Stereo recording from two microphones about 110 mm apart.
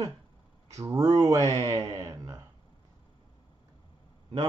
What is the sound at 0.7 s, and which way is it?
Speech, 30° right (ahead or behind).